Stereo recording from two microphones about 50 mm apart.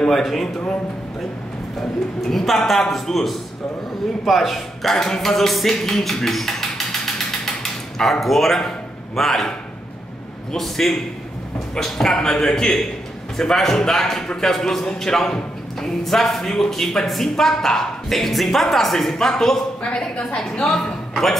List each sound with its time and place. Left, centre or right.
0.0 s speech: centre
1.8 s a man's voice: centre
8.0 s a man's voice: centre
19.8 s a woman's voice: left
20.3 s a man's voice: centre